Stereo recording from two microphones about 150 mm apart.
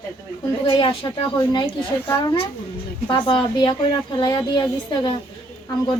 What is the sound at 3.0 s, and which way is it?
A woman's voice, 30° left (ahead or behind).